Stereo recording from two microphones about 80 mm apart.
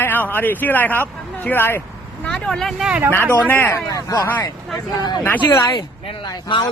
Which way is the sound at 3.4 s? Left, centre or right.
Left.